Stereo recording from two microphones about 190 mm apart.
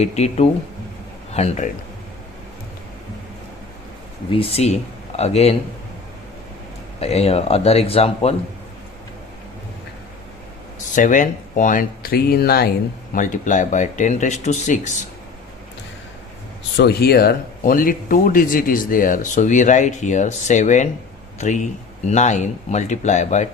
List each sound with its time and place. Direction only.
0.0 s speech: 35° left (ahead or behind)
4.3 s speech: 30° left (ahead or behind)
7.0 s speech: 35° left (ahead or behind)
10.9 s speech: 45° left (ahead or behind)
13.1 s speech: 40° left (ahead or behind)
16.7 s speech: 60° left (ahead or behind); by 23.5 s 40° left (ahead or behind)